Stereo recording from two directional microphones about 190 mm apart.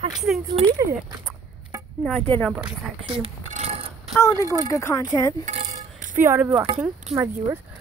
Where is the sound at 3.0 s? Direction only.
30° right (ahead or behind).